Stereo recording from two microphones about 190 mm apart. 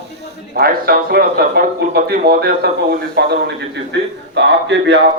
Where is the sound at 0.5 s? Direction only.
50° right (ahead or behind).